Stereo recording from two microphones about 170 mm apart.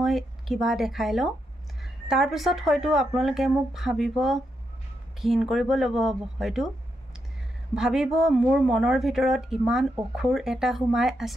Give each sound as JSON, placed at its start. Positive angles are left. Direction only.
{"t": 0.0, "sound": "speech", "side_deg": 0}
{"t": 7.7, "sound": "speech", "side_deg": -5}